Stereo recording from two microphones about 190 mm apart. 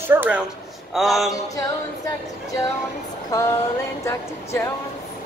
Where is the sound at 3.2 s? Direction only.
15° left (ahead or behind).